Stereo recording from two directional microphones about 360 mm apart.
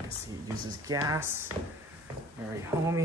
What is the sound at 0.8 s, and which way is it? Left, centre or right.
Speech, centre.